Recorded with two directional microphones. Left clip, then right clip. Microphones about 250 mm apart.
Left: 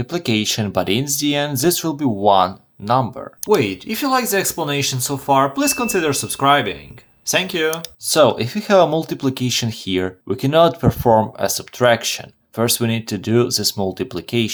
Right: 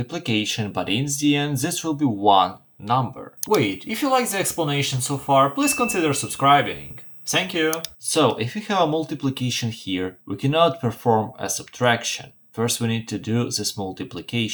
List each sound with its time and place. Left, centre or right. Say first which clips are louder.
0.0 s speech: left 4 dB; left